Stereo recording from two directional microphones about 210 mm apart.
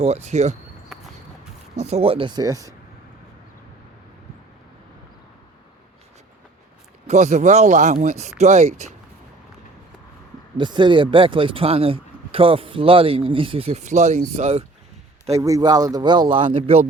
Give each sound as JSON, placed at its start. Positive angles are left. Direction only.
{"t": 0.0, "sound": "speech", "side_deg": -30}
{"t": 1.7, "sound": "speech", "side_deg": -30}
{"t": 7.1, "sound": "speech", "side_deg": -35}
{"t": 10.6, "sound": "speech", "side_deg": -20}
{"t": 15.3, "sound": "speech", "side_deg": -15}